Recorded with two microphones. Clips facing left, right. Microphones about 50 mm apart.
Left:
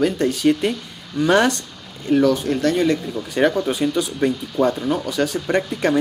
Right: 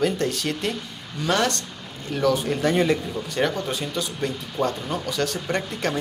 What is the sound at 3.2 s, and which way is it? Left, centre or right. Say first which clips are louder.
Speech: left 7 dB; centre.